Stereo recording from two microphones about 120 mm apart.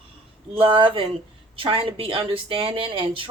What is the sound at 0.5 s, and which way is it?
Speech, 45° right (ahead or behind).